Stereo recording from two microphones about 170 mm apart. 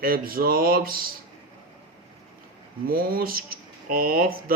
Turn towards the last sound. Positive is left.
turn(degrees=-60)  # may be behind; listen again after turning